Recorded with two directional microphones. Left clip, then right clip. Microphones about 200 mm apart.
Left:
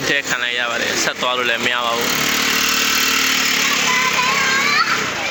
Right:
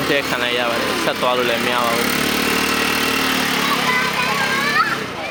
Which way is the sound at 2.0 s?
45° right (ahead or behind).